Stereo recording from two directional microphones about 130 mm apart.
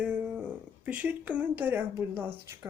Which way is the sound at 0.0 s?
5° right (ahead or behind).